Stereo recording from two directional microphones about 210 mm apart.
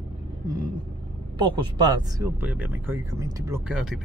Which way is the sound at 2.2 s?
10° right (ahead or behind).